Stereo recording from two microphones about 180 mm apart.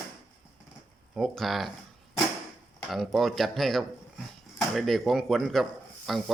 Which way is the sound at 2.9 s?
Centre (ahead or behind).